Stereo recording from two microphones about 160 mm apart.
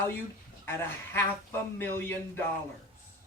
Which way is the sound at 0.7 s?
15° left (ahead or behind).